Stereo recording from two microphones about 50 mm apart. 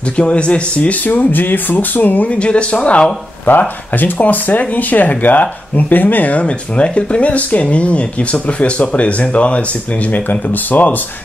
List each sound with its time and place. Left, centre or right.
0.2 s speech: left
1.0 s speech: left
2.3 s speech: left
3.4 s speech: left
6.4 s speech: left
10.7 s speech: left